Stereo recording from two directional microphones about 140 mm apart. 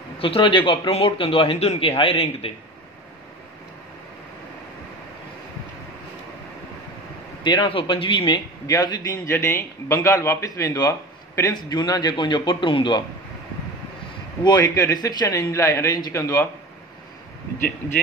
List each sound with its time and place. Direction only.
0.2 s speech: 40° left (ahead or behind)
7.4 s a man's voice: 35° left (ahead or behind)
14.4 s a man's voice: 30° left (ahead or behind)